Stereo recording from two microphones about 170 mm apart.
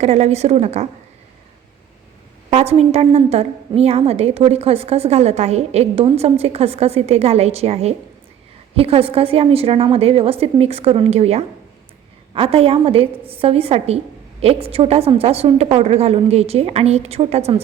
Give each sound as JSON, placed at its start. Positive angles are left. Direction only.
{"t": 0.0, "sound": "a woman's voice", "side_deg": -40}
{"t": 2.5, "sound": "a woman's voice", "side_deg": -35}